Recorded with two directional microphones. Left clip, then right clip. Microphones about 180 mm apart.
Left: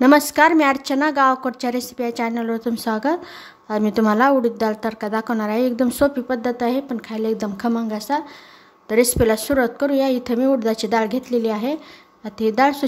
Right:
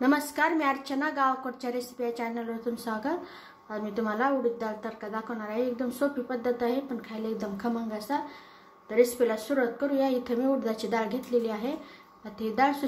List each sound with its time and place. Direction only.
0.0 s a woman's voice: 40° left (ahead or behind)